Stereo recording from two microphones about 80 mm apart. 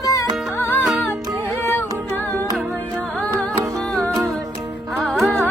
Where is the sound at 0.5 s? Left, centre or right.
Left.